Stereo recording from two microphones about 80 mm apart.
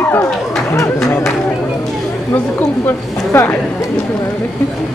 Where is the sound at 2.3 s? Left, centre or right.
Left.